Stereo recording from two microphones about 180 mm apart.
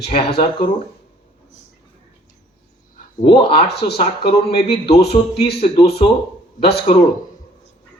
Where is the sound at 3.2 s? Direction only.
35° left (ahead or behind).